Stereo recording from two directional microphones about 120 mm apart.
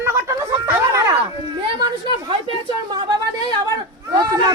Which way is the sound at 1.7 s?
40° right (ahead or behind).